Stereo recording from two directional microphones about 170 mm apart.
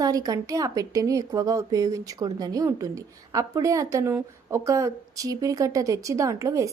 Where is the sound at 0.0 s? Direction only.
20° right (ahead or behind).